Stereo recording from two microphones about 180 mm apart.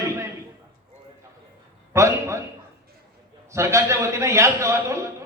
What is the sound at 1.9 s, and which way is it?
Speech, 15° right (ahead or behind).